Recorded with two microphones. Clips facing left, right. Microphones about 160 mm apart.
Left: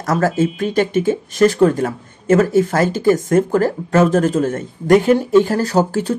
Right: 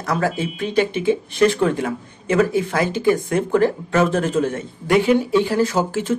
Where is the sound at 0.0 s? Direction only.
40° left (ahead or behind).